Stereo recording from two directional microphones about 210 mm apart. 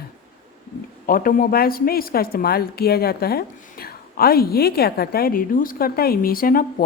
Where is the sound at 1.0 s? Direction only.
40° left (ahead or behind).